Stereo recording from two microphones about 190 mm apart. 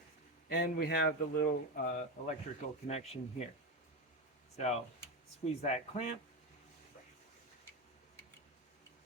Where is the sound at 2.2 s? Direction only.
35° left (ahead or behind).